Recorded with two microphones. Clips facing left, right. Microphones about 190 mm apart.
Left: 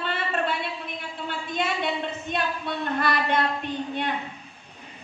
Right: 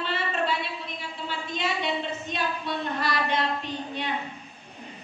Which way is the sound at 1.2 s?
55° left (ahead or behind).